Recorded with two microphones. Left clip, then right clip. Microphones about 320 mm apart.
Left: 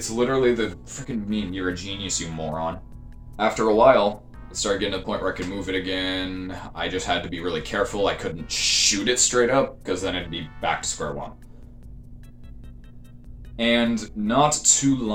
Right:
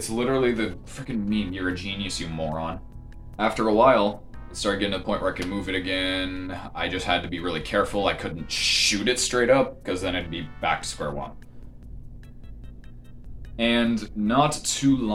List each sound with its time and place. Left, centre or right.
0.2 s speech: centre
13.6 s speech: centre